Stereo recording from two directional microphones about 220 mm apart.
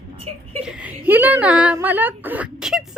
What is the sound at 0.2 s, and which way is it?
Speech, 25° right (ahead or behind).